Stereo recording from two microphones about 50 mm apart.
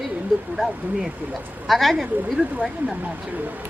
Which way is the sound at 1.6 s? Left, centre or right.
Centre.